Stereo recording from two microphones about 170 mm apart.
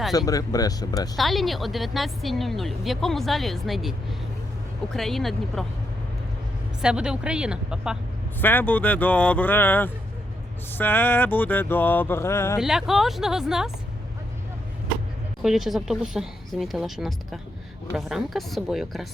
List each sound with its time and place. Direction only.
0.1 s speech: 20° left (ahead or behind)
1.1 s a woman's voice: centre (ahead or behind)
4.9 s a woman's voice: centre (ahead or behind)
6.8 s a woman's voice: 5° right (ahead or behind)
8.4 s speech: 10° left (ahead or behind)
12.5 s a woman's voice: centre (ahead or behind)
15.4 s a woman's voice: centre (ahead or behind)